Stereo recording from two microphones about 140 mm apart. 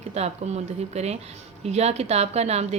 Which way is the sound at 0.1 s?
50° right (ahead or behind).